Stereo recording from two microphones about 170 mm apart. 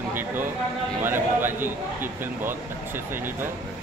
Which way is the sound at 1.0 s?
10° right (ahead or behind).